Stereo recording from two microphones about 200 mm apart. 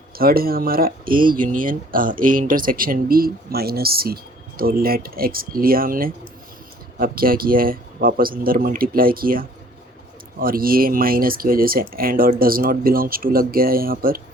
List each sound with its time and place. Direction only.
0.2 s speech: 50° right (ahead or behind)